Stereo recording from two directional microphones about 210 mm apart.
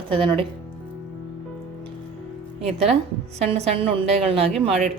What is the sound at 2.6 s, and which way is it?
A woman's voice, 30° right (ahead or behind).